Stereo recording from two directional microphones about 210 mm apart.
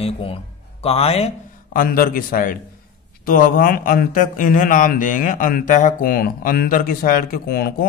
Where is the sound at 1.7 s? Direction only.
40° left (ahead or behind).